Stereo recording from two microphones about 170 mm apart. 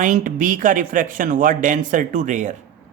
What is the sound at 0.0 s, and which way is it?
Speech, 50° right (ahead or behind).